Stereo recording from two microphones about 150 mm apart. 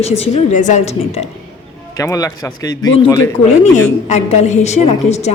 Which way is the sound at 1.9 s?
20° left (ahead or behind).